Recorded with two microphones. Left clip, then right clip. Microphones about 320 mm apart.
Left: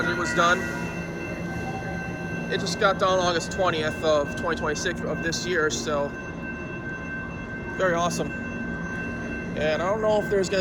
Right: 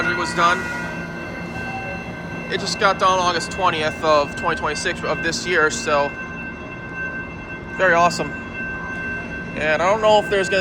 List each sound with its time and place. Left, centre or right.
0.0 s music: centre
2.5 s speech: centre
7.8 s speech: centre
9.6 s speech: centre
10.0 s speech: right